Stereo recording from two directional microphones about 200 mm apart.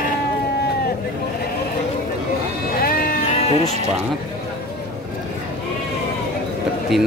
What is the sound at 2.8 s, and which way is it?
Music, 45° left (ahead or behind).